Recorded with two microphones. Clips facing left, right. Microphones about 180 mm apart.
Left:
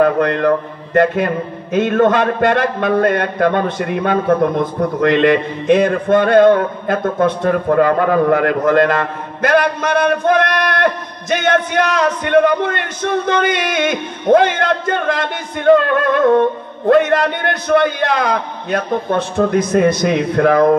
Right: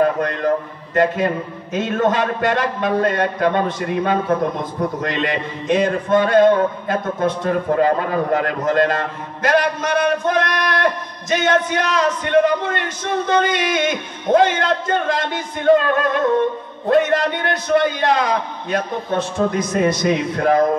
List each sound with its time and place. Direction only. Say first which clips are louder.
0.0 s a man's voice: left 4 dB; 55° left (ahead or behind)